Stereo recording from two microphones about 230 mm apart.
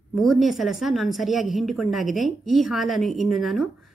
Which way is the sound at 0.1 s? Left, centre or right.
Centre.